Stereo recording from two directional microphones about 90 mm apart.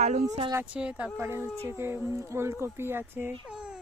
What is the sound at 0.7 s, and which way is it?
Speech, 15° right (ahead or behind).